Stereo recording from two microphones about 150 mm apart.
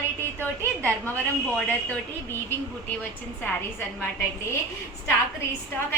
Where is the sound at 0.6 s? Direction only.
20° right (ahead or behind).